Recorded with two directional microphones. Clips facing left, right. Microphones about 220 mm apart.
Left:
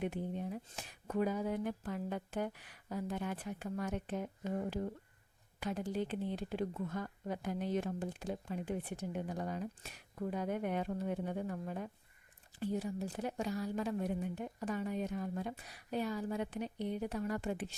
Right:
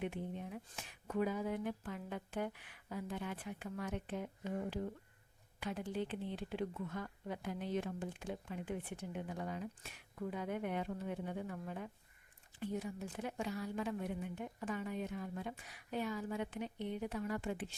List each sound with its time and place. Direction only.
0.0 s speech: 40° left (ahead or behind)